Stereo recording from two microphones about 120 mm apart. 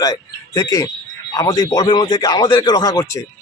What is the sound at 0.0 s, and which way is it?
Speech, 30° left (ahead or behind).